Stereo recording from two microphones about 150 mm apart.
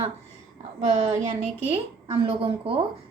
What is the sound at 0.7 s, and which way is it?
A woman's voice, 45° right (ahead or behind).